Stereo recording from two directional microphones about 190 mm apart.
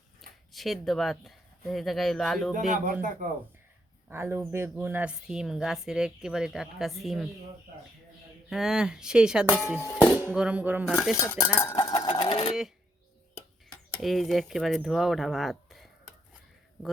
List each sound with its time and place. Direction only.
0.2 s speech: centre (ahead or behind)
2.5 s speech: 45° right (ahead or behind)
4.1 s speech: 10° right (ahead or behind)
8.4 s speech: centre (ahead or behind)
11.7 s sewing machine: 20° left (ahead or behind)
14.0 s speech: centre (ahead or behind)